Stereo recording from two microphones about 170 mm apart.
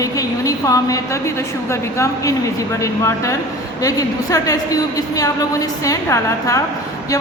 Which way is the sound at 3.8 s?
20° left (ahead or behind).